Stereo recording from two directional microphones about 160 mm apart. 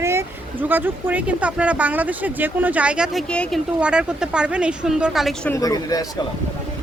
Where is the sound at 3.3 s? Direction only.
5° left (ahead or behind).